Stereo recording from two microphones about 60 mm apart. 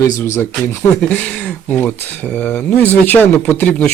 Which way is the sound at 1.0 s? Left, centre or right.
Left.